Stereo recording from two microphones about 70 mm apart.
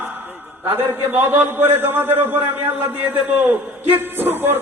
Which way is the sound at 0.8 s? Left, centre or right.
Right.